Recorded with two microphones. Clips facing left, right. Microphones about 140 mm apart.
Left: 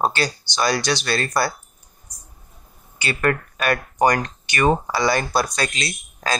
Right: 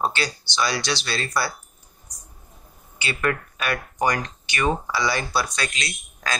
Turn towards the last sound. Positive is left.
turn(degrees=35)  # may be behind; listen again after turning